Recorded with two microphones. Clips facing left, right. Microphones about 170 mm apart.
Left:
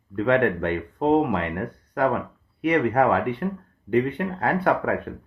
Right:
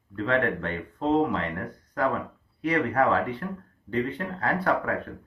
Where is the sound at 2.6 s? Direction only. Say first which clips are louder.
Left 4 dB; 65° left (ahead or behind).